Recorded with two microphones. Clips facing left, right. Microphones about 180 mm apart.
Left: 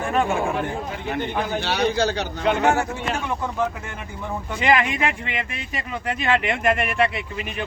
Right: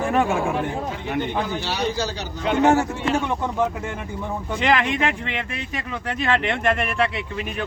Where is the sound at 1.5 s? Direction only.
55° left (ahead or behind).